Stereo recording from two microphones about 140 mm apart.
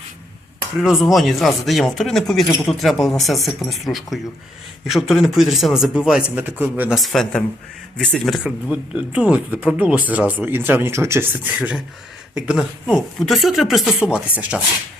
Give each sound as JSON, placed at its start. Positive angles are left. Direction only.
{"t": 0.8, "sound": "a woman's voice", "side_deg": 0}
{"t": 6.9, "sound": "a woman's voice", "side_deg": 0}